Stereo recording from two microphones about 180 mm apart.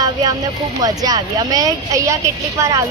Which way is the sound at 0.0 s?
20° right (ahead or behind).